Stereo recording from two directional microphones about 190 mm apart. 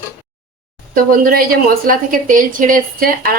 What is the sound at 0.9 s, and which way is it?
Speech, 50° right (ahead or behind).